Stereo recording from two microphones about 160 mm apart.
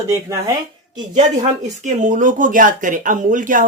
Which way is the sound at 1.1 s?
45° right (ahead or behind).